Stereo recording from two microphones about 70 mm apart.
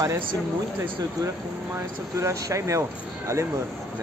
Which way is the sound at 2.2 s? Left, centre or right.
Right.